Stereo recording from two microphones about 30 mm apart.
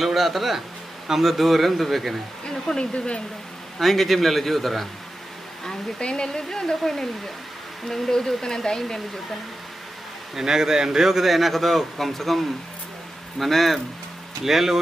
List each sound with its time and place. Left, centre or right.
0.0 s speech: centre
2.6 s speech: left
3.8 s speech: centre
5.9 s speech: left
6.2 s speech: left
6.8 s speech: centre
10.3 s speech: centre
14.4 s speech: centre